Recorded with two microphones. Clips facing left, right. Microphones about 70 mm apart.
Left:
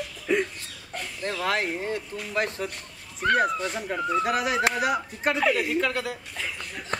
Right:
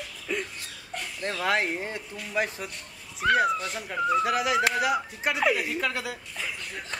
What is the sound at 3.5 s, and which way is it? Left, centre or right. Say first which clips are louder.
Speech: left 3 dB; left.